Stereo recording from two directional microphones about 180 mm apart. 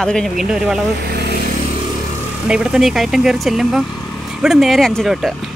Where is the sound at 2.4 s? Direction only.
5° right (ahead or behind).